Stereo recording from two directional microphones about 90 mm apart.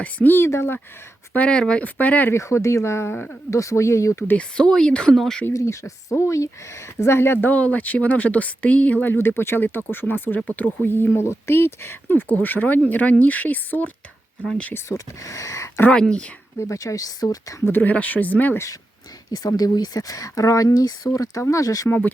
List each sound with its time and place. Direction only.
0.0 s speech: 20° left (ahead or behind)
1.3 s speech: 10° left (ahead or behind)
2.3 s speech: 35° left (ahead or behind)
4.3 s speech: 10° left (ahead or behind)
5.5 s speech: 35° left (ahead or behind)
14.8 s speech: 40° left (ahead or behind)
15.8 s speech: 10° left (ahead or behind)
16.6 s speech: 35° left (ahead or behind)
17.7 s speech: 20° left (ahead or behind)
19.4 s speech: 45° left (ahead or behind)
21.8 s speech: 20° left (ahead or behind)